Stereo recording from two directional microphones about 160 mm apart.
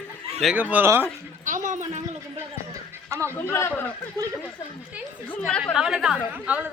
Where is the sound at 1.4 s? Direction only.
55° right (ahead or behind).